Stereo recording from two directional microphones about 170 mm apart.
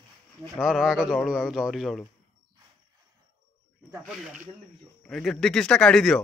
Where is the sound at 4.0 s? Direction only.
Centre (ahead or behind).